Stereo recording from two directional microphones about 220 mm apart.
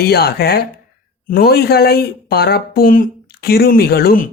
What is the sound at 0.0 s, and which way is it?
Speech, 45° left (ahead or behind).